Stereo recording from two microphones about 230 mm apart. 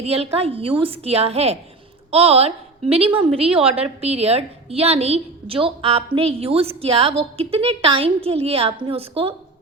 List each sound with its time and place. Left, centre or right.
0.0 s a woman's voice: right